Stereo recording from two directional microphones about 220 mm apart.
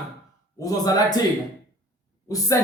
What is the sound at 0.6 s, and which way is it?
Speech, 15° left (ahead or behind).